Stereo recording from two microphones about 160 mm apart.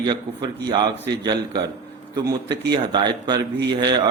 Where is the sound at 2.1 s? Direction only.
25° right (ahead or behind).